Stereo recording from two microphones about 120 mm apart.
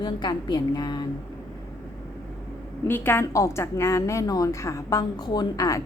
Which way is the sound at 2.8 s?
15° left (ahead or behind).